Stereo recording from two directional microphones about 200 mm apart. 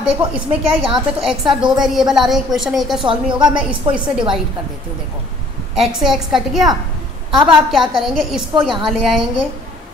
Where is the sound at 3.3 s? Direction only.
25° right (ahead or behind).